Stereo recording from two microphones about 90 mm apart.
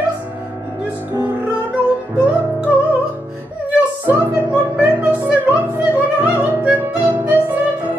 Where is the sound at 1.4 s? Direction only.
15° right (ahead or behind).